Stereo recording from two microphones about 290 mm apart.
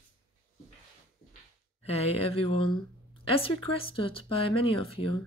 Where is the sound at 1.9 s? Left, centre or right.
Centre.